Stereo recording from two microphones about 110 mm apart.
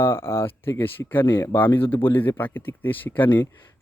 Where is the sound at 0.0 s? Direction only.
25° left (ahead or behind).